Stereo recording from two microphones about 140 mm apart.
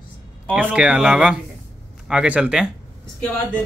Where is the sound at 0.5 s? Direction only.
10° right (ahead or behind).